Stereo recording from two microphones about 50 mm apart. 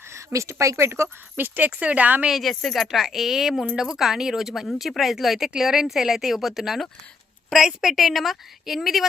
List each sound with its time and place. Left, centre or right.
0.3 s speech: right
1.4 s speech: right
2.3 s speech: centre